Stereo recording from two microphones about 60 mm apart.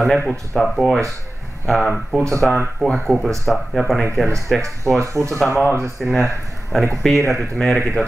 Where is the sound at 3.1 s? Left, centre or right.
Right.